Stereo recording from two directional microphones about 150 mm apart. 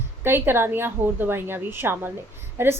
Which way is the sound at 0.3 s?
15° right (ahead or behind).